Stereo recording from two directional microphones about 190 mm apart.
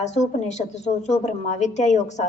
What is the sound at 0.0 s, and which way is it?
A woman's voice, 35° left (ahead or behind).